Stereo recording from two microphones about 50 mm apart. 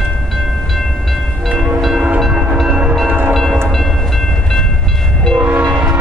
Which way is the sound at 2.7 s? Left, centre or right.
Centre.